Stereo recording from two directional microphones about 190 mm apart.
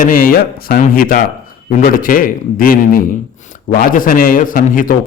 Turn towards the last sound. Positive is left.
turn(degrees=45)  # may be behind; listen again after turning